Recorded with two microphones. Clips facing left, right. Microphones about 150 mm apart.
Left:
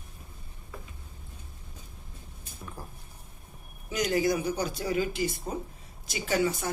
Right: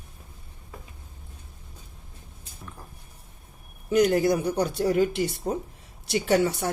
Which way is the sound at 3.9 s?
55° right (ahead or behind).